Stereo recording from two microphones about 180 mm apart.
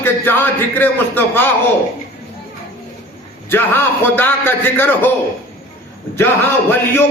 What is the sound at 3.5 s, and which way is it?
Speech, 10° left (ahead or behind).